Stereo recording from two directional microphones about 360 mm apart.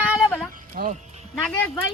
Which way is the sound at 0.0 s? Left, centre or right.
Centre.